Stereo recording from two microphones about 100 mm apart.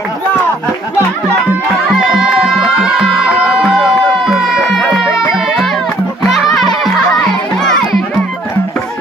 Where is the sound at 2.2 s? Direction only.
5° right (ahead or behind).